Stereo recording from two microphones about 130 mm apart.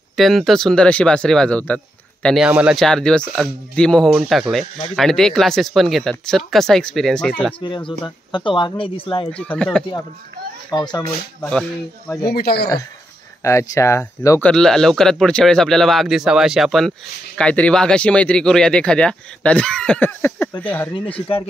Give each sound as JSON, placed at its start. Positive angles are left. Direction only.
{"t": 0.1, "sound": "speech", "side_deg": 0}
{"t": 2.2, "sound": "speech", "side_deg": 0}
{"t": 7.6, "sound": "speech", "side_deg": 40}
{"t": 9.3, "sound": "speech", "side_deg": 10}
{"t": 10.7, "sound": "speech", "side_deg": 35}
{"t": 11.1, "sound": "speech", "side_deg": 5}
{"t": 12.1, "sound": "speech", "side_deg": 30}
{"t": 14.4, "sound": "speech", "side_deg": 5}